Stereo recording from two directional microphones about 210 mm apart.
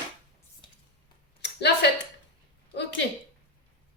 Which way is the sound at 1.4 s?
55° left (ahead or behind).